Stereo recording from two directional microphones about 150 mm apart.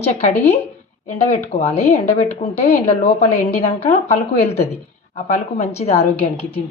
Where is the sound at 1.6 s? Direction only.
45° left (ahead or behind).